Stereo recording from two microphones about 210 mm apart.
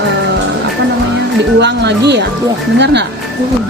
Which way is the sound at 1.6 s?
55° right (ahead or behind).